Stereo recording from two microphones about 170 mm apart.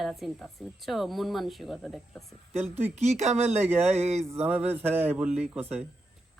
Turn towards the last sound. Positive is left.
turn(degrees=-10)  # may be behind; listen again after turning